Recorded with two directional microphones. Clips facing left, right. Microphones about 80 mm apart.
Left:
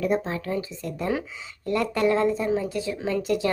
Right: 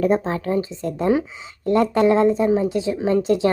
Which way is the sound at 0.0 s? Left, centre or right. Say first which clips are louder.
Right 6 dB; right.